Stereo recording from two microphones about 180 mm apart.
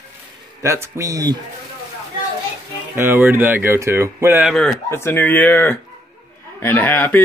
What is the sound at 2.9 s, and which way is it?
Speech, 10° right (ahead or behind).